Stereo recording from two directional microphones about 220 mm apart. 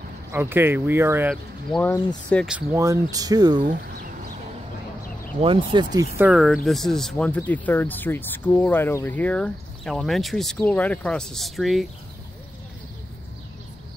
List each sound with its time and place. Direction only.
0.3 s speech: 10° right (ahead or behind)
1.8 s speech: 10° left (ahead or behind)
2.5 s speech: 15° right (ahead or behind)
5.4 s speech: 25° right (ahead or behind)
6.1 s speech: 5° right (ahead or behind)